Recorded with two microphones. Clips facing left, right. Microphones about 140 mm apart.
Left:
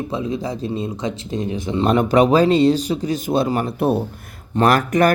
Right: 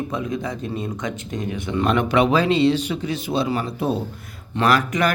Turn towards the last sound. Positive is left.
turn(degrees=50)  # may be behind; listen again after turning